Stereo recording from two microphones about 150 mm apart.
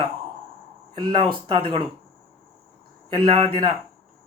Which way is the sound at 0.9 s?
30° right (ahead or behind).